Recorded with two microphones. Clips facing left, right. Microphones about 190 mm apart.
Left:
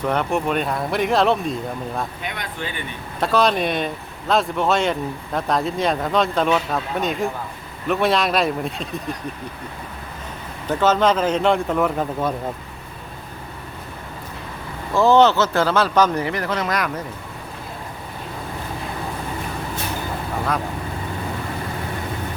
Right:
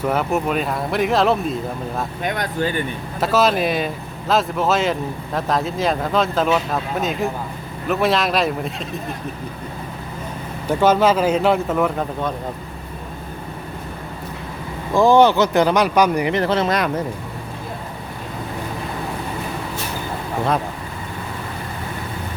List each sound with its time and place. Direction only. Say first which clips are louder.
0.0 s speech: right 1 dB; 5° right (ahead or behind)
2.2 s speech: right 8 dB; 45° right (ahead or behind)
3.2 s speech: right 1 dB; 5° right (ahead or behind)
10.7 s speech: right 2 dB; 10° right (ahead or behind)
14.9 s speech: right 2 dB; 15° right (ahead or behind)
16.3 s speech: right 5 dB; 25° right (ahead or behind)